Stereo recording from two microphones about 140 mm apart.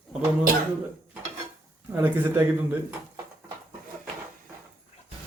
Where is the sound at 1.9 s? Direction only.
15° right (ahead or behind).